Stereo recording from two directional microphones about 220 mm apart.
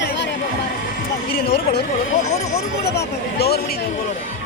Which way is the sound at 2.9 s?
45° left (ahead or behind).